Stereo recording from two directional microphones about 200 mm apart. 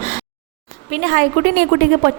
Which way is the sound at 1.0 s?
45° right (ahead or behind).